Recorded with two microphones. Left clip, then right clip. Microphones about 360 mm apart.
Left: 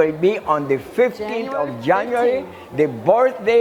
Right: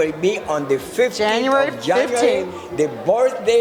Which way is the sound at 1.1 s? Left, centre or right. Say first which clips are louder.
Right 7 dB; right.